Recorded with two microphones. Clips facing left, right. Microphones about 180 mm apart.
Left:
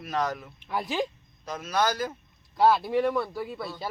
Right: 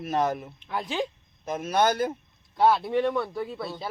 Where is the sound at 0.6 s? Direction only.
5° left (ahead or behind).